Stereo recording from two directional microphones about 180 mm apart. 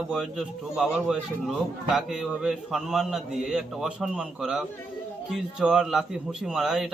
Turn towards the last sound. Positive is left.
turn(degrees=0)  # may be behind; listen again after turning